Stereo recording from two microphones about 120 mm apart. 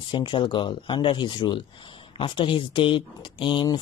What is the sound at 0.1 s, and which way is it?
Speech, 45° left (ahead or behind).